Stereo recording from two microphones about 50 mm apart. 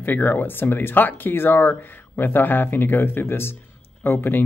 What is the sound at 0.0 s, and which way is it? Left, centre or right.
Speech, left.